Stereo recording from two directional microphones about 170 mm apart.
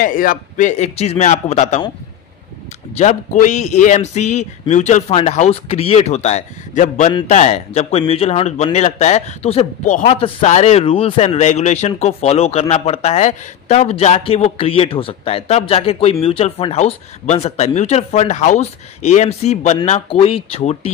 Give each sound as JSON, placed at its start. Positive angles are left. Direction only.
{"t": 0.0, "sound": "a man's voice", "side_deg": 55}
{"t": 3.0, "sound": "speech", "side_deg": 45}